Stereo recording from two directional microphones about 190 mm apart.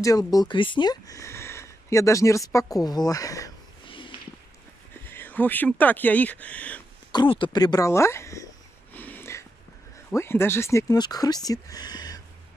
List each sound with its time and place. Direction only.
0.0 s speech: 20° left (ahead or behind)
5.0 s speech: 10° left (ahead or behind)
7.1 s speech: 25° left (ahead or behind)
8.9 s a sound: 10° left (ahead or behind)
10.1 s speech: 10° left (ahead or behind)